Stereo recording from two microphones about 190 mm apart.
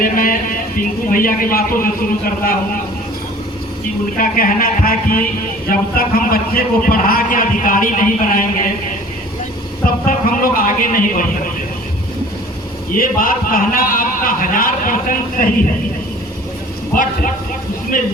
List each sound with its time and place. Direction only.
0.0 s a man's voice: 45° left (ahead or behind)
4.2 s a man's voice: 45° left (ahead or behind)
10.1 s a man's voice: 50° left (ahead or behind)
13.0 s a man's voice: 50° left (ahead or behind)